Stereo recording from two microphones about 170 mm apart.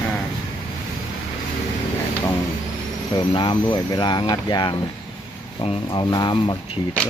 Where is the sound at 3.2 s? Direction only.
30° left (ahead or behind).